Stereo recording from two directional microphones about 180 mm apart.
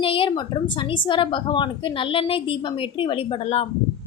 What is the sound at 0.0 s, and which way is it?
A woman's voice, 30° left (ahead or behind).